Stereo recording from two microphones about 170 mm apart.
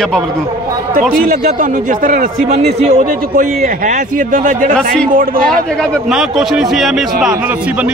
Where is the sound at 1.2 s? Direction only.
50° right (ahead or behind).